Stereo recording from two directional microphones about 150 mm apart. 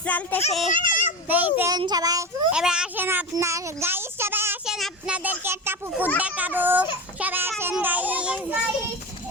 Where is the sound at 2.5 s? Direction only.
5° right (ahead or behind).